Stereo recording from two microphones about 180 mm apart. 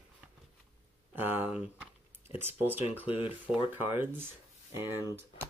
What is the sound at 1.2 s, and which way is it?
Speech, 10° right (ahead or behind).